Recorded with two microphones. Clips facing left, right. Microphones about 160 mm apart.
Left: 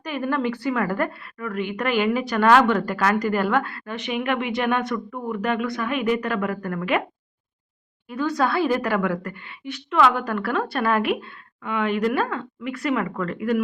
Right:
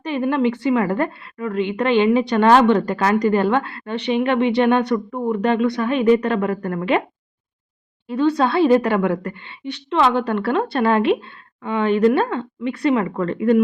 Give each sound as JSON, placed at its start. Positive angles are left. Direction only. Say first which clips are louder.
{"t": 0.0, "sound": "a woman's voice", "louder": "right 5 dB", "side_deg": -25}
{"t": 8.0, "sound": "a woman's voice", "louder": "right 5 dB", "side_deg": -30}